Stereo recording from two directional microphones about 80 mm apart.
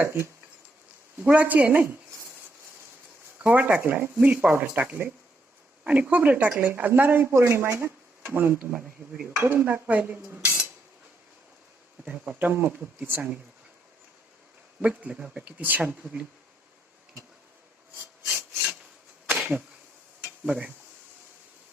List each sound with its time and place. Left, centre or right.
0.0 s speech: right
1.2 s speech: centre
3.4 s speech: centre
12.0 s speech: centre
14.8 s speech: centre
19.3 s a sound: centre